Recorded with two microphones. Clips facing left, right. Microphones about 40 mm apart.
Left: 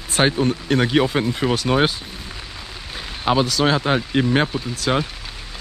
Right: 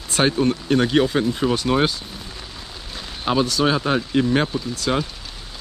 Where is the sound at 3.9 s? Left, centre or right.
Left.